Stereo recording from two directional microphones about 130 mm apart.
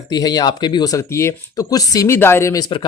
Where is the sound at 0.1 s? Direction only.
30° left (ahead or behind).